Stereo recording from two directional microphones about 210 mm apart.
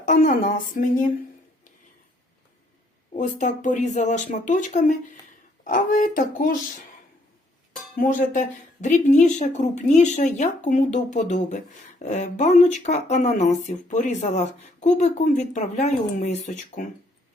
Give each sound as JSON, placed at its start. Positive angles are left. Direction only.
{"t": 0.0, "sound": "speech", "side_deg": 40}
{"t": 3.1, "sound": "speech", "side_deg": 35}
{"t": 7.9, "sound": "speech", "side_deg": 35}